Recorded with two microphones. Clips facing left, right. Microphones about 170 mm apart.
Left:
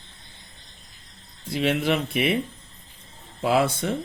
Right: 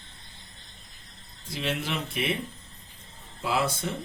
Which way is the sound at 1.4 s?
60° left (ahead or behind).